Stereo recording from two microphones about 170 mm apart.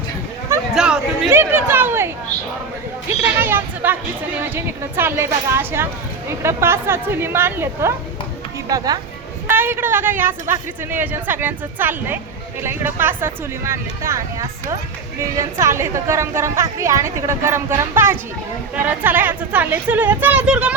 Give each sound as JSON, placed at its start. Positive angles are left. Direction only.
{"t": 0.7, "sound": "chatter", "side_deg": -5}
{"t": 1.3, "sound": "a sound", "side_deg": -15}
{"t": 3.3, "sound": "a woman's voice", "side_deg": -10}